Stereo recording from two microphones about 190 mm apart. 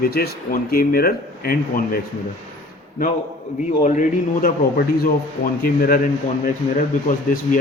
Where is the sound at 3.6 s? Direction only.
40° left (ahead or behind).